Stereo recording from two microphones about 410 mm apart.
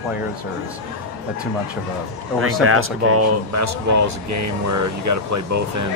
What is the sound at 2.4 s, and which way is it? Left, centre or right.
Speech, right.